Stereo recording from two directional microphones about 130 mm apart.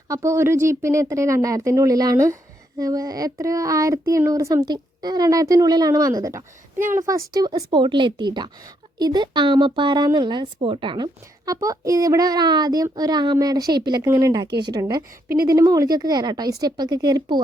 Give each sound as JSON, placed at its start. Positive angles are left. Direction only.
{"t": 0.1, "sound": "a woman's voice", "side_deg": -20}
{"t": 6.7, "sound": "a woman's voice", "side_deg": -85}
{"t": 7.0, "sound": "speech", "side_deg": -25}